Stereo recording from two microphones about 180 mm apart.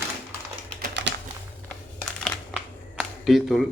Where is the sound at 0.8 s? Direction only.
75° right (ahead or behind).